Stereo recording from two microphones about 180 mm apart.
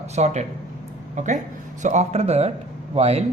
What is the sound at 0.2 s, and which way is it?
A man's voice, 40° right (ahead or behind).